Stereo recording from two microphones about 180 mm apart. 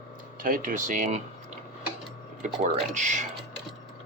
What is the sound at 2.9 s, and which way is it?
Speech, 40° right (ahead or behind).